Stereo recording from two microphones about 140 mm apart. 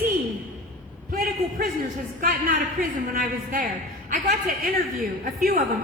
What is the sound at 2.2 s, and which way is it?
A woman's voice, 90° right.